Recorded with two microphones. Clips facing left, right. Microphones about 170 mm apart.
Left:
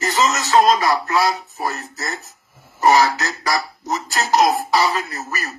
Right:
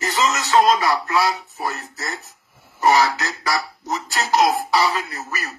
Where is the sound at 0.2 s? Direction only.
40° left (ahead or behind).